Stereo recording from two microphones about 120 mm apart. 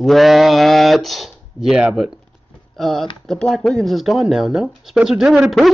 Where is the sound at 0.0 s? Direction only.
Centre (ahead or behind).